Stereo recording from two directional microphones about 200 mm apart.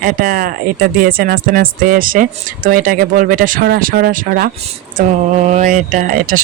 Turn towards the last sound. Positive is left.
turn(degrees=-40)  # may be behind; listen again after turning